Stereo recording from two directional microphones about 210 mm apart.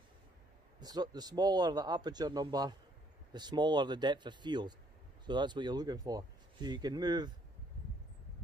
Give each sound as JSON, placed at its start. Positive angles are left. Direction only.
{"t": 0.7, "sound": "speech", "side_deg": -20}